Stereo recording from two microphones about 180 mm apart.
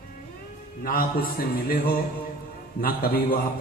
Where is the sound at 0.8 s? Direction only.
55° left (ahead or behind).